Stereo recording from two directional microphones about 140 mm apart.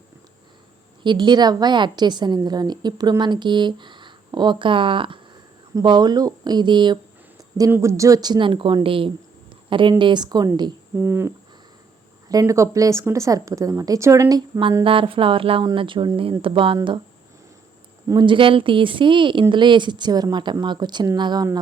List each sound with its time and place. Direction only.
1.0 s a woman's voice: 35° right (ahead or behind)
7.7 s a woman's voice: 20° right (ahead or behind)
10.9 s cricket: 15° right (ahead or behind)
12.3 s speech: 25° right (ahead or behind)
14.8 s a woman's voice: 40° right (ahead or behind)
18.1 s a woman's voice: 35° right (ahead or behind)